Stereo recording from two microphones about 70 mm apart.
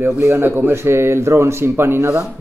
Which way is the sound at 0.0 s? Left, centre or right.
Right.